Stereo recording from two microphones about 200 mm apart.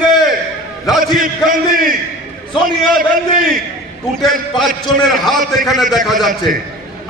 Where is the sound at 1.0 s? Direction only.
45° right (ahead or behind).